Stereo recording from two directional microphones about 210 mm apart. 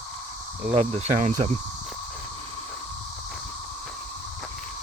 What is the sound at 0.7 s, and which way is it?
Speech, 30° right (ahead or behind).